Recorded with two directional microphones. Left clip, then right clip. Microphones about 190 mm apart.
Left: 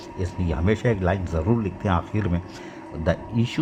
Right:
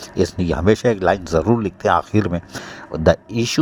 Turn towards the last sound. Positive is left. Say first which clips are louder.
# right 8 dB
turn(degrees=-40)  # may be behind; listen again after turning